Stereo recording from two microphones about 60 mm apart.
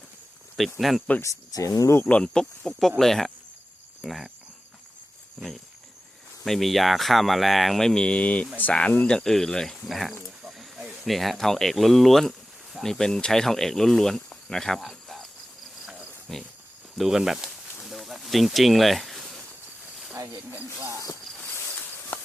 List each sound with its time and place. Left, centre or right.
0.5 s speech: centre
1.2 s speech: left
2.0 s speech: centre
6.4 s speech: centre
16.3 s speech: centre
17.8 s a sound: centre
22.1 s a sound: left